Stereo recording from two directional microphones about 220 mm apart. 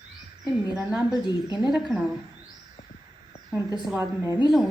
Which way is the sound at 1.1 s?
20° left (ahead or behind).